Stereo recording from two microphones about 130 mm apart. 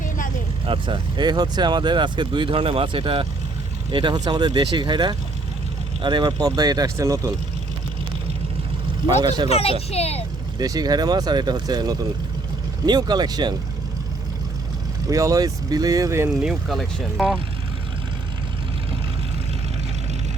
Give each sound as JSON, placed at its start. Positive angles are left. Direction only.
{"t": 0.6, "sound": "speech", "side_deg": -45}
{"t": 9.2, "sound": "speech", "side_deg": -35}
{"t": 9.5, "sound": "a child's voice", "side_deg": 50}
{"t": 10.6, "sound": "speech", "side_deg": -30}
{"t": 15.0, "sound": "speech", "side_deg": -25}
{"t": 16.4, "sound": "speech", "side_deg": -5}